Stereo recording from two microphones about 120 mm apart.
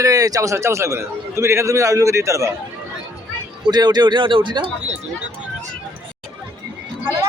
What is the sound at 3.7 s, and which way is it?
Speech, 35° right (ahead or behind).